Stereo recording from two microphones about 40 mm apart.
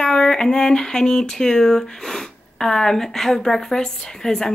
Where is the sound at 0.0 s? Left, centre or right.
Centre.